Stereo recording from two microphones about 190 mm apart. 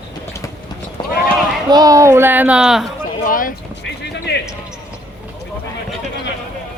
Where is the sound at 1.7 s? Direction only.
20° right (ahead or behind); by 2.9 s 5° right (ahead or behind).